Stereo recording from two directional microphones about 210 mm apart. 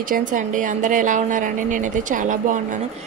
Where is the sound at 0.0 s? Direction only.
40° right (ahead or behind).